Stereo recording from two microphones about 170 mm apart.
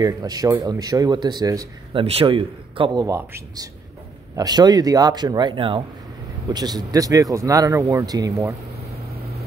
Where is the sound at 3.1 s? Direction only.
15° right (ahead or behind).